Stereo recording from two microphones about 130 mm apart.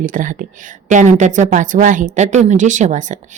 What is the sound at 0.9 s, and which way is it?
Speech, 70° right (ahead or behind).